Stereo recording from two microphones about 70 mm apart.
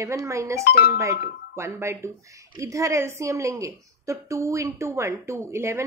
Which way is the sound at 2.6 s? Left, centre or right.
Right.